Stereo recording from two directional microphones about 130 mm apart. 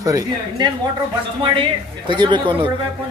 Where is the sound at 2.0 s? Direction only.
40° right (ahead or behind).